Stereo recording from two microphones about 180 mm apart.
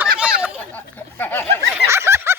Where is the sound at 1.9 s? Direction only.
15° right (ahead or behind).